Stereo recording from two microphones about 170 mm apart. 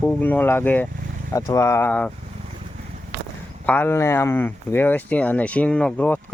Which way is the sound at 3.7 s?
15° left (ahead or behind).